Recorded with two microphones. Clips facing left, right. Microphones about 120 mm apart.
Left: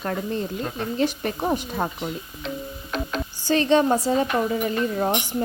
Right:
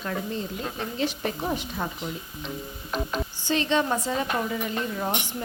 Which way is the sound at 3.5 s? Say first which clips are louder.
Left 6 dB; 40° left (ahead or behind).